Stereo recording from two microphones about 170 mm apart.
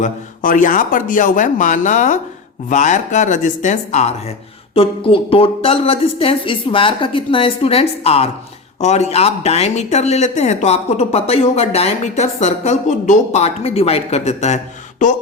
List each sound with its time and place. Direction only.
0.0 s speech: 50° left (ahead or behind)
4.7 s speech: 35° left (ahead or behind)